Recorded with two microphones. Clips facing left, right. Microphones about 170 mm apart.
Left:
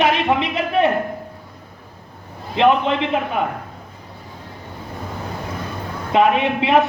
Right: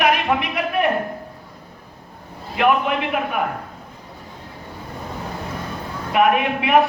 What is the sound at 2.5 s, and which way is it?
Speech, 25° left (ahead or behind).